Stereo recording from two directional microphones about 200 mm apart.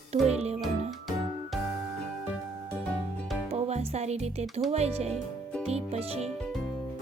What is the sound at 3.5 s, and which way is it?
Speech, 30° right (ahead or behind).